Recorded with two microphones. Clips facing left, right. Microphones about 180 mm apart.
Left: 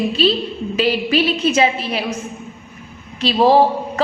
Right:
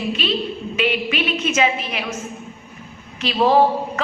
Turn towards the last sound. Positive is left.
turn(degrees=35)  # may be behind; listen again after turning